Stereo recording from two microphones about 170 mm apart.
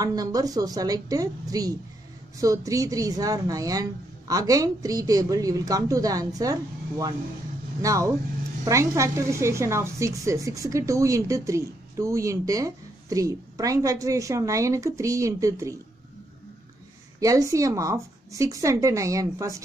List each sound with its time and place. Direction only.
0.0 s a woman's voice: 20° right (ahead or behind)
17.2 s a woman's voice: 20° right (ahead or behind)